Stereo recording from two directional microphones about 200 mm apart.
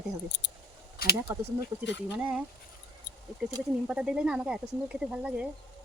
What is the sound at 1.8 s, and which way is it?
Speech, 60° left (ahead or behind).